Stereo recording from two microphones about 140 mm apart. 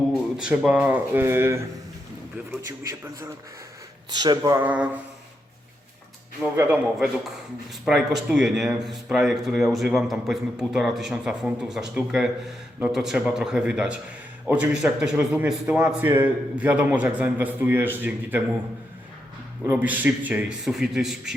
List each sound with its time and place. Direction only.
0.1 s speech: 5° right (ahead or behind)
2.9 s a man's voice: 20° right (ahead or behind)
4.1 s speech: 30° right (ahead or behind)
4.6 s a man's voice: 10° right (ahead or behind)
6.4 s a man's voice: 10° right (ahead or behind)
19.7 s speech: 10° right (ahead or behind)